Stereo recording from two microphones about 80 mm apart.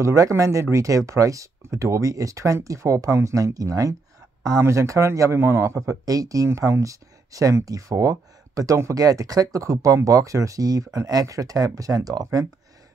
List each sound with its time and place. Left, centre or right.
0.0 s a man's voice: right